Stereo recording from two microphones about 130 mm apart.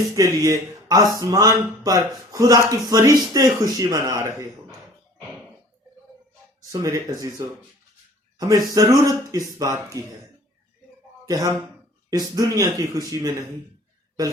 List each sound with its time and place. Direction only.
0.2 s speech: 30° right (ahead or behind)
6.6 s speech: 25° right (ahead or behind)
11.3 s speech: 30° right (ahead or behind)